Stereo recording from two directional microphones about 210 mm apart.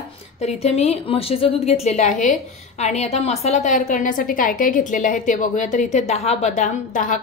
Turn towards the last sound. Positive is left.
turn(degrees=40)  # may be behind; listen again after turning